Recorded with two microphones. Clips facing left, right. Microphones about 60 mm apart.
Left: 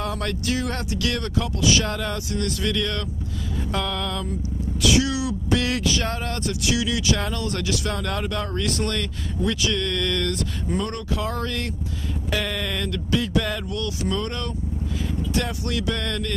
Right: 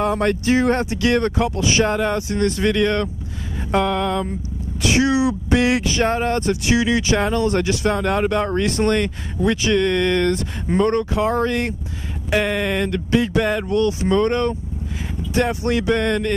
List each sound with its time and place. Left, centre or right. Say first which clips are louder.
0.0 s speech: right 8 dB; right